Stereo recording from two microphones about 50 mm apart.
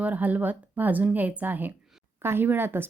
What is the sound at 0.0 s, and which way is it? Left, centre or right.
A woman's voice, right.